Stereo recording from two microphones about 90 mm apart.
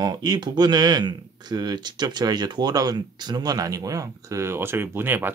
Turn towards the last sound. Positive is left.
turn(degrees=-25)  # may be behind; listen again after turning